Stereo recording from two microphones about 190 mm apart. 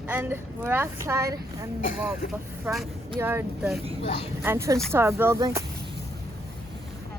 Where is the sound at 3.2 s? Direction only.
10° right (ahead or behind).